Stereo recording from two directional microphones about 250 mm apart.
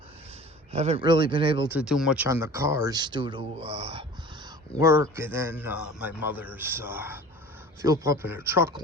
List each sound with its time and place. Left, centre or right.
0.7 s speech: right
1.7 s a man's voice: centre; by 4.0 s right
4.8 s a man's voice: centre